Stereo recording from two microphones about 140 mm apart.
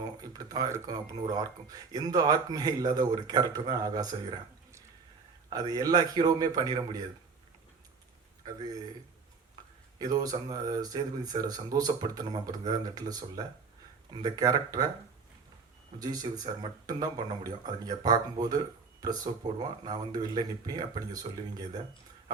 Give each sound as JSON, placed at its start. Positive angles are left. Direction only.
{"t": 0.0, "sound": "speech", "side_deg": -25}
{"t": 5.5, "sound": "speech", "side_deg": -30}
{"t": 10.0, "sound": "speech", "side_deg": -25}
{"t": 16.0, "sound": "speech", "side_deg": -30}